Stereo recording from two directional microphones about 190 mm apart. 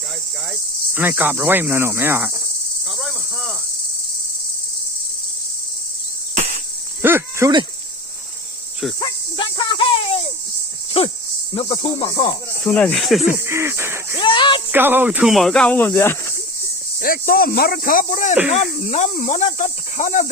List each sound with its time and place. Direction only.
0.9 s cricket: 10° right (ahead or behind)
2.9 s insect: centre (ahead or behind)
7.0 s cricket: 15° right (ahead or behind)
9.0 s speech: 25° left (ahead or behind)
11.0 s cricket: 30° left (ahead or behind)
11.5 s speech: 30° left (ahead or behind)
12.6 s speech: 5° left (ahead or behind)
13.4 s cricket: 15° right (ahead or behind)
14.2 s speech: 25° left (ahead or behind)
14.7 s speech: 10° right (ahead or behind); by 16.3 s 10° left (ahead or behind)
17.0 s speech: 50° left (ahead or behind)
18.5 s cricket: 35° left (ahead or behind)